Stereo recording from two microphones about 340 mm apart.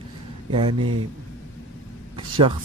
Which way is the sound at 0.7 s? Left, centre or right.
Right.